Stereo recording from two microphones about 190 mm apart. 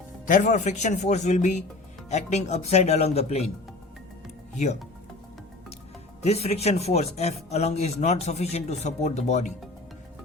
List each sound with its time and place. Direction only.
0.3 s speech: 45° left (ahead or behind)
4.5 s speech: 35° left (ahead or behind)
6.2 s speech: 35° left (ahead or behind)